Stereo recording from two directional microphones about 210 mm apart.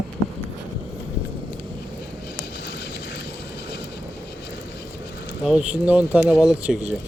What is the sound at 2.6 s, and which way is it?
Vehicle, 55° left (ahead or behind).